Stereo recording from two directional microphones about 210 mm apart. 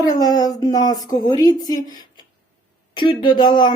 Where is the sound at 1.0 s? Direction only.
40° left (ahead or behind).